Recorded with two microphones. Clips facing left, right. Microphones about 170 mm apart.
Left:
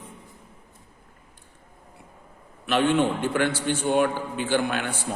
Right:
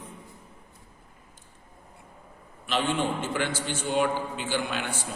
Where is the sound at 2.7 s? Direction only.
60° left (ahead or behind).